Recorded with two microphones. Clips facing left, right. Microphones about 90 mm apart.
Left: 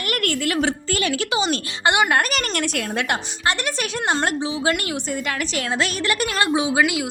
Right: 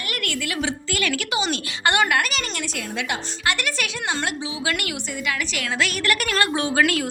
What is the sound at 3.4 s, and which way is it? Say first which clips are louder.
Speech: left 1 dB; 35° left (ahead or behind).